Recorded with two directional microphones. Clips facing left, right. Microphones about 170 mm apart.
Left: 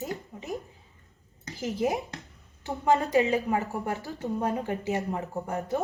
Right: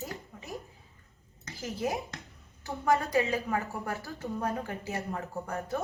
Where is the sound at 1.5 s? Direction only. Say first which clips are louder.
Left 5 dB; 20° left (ahead or behind).